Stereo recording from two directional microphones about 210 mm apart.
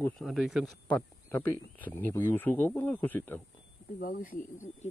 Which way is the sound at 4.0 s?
40° left (ahead or behind).